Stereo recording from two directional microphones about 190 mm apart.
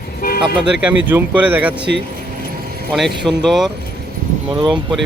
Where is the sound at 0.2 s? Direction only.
50° left (ahead or behind).